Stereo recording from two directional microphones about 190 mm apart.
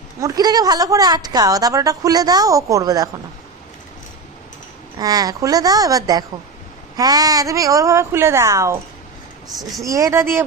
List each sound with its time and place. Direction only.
0.2 s a woman's voice: 20° right (ahead or behind)
4.9 s a woman's voice: 20° right (ahead or behind)
9.5 s a woman's voice: centre (ahead or behind)
9.8 s a woman's voice: 15° right (ahead or behind)